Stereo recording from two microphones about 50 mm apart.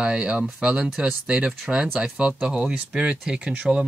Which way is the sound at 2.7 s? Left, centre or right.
Right.